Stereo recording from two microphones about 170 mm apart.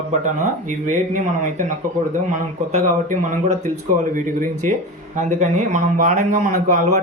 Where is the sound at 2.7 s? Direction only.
45° right (ahead or behind).